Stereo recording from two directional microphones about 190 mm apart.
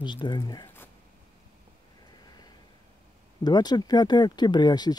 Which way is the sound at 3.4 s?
20° left (ahead or behind).